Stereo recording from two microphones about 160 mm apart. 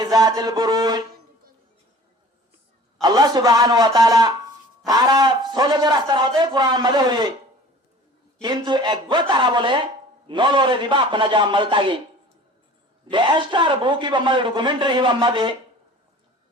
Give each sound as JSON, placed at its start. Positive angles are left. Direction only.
{"t": 0.0, "sound": "speech", "side_deg": -25}
{"t": 3.0, "sound": "speech", "side_deg": -25}
{"t": 8.4, "sound": "speech", "side_deg": -25}
{"t": 13.1, "sound": "speech", "side_deg": -30}